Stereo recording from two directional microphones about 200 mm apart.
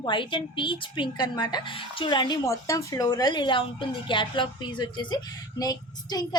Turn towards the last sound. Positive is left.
turn(degrees=20)  # may be behind; listen again after turning